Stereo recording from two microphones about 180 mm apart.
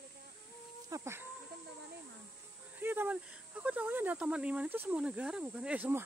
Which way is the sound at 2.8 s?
10° right (ahead or behind).